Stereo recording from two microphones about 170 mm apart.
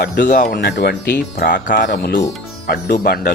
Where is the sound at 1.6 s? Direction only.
55° left (ahead or behind).